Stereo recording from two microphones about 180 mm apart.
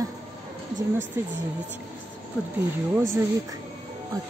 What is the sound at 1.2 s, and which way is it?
Speech, 15° right (ahead or behind).